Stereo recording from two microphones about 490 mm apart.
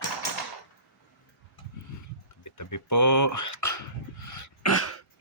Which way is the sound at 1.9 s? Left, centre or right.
Left.